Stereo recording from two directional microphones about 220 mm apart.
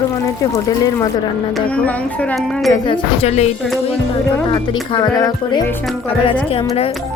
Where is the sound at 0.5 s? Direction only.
15° left (ahead or behind).